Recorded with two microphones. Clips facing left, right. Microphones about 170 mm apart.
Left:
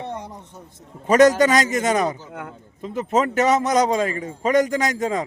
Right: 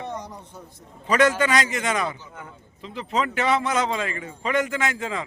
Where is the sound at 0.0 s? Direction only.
30° left (ahead or behind).